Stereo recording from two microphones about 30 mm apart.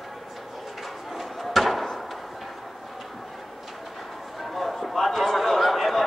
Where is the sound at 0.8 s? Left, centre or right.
Centre.